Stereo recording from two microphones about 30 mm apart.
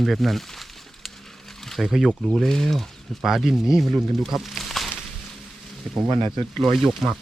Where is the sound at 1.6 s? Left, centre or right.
Centre.